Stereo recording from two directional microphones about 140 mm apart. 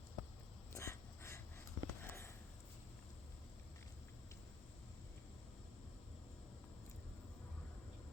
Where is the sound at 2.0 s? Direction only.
20° left (ahead or behind).